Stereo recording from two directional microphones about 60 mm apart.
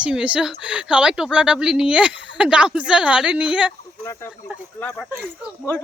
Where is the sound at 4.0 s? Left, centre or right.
Left.